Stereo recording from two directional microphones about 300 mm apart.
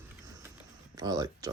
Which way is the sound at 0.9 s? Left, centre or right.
Centre.